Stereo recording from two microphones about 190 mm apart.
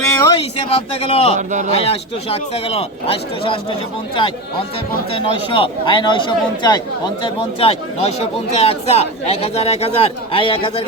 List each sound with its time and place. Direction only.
0.1 s a sound: 15° left (ahead or behind)
0.3 s speech: 30° left (ahead or behind)
1.4 s speech: 40° right (ahead or behind)
1.8 s speech: 30° left (ahead or behind)
5.1 s speech: 25° left (ahead or behind)